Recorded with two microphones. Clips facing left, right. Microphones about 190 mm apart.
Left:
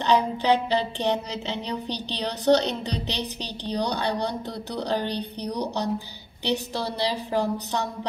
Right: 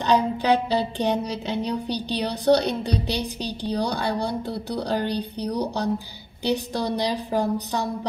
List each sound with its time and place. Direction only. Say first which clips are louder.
0.0 s speech: right 1 dB; 15° right (ahead or behind)